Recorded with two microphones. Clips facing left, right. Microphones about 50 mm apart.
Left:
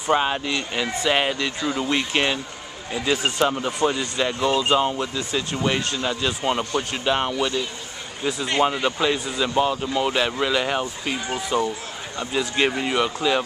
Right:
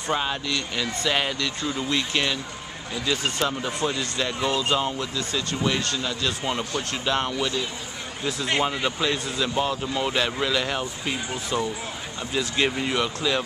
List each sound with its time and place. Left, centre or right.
0.1 s speech: left
4.8 s speech: centre
6.6 s speech: centre
8.2 s speech: centre